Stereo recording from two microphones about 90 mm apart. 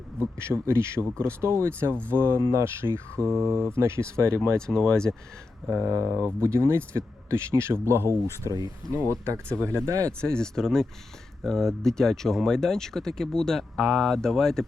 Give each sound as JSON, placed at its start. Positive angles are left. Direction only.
{"t": 0.2, "sound": "speech", "side_deg": -30}
{"t": 3.2, "sound": "speech", "side_deg": 5}
{"t": 3.6, "sound": "speech", "side_deg": -30}
{"t": 4.6, "sound": "speech", "side_deg": 10}
{"t": 5.7, "sound": "speech", "side_deg": -35}
{"t": 10.1, "sound": "speech", "side_deg": 10}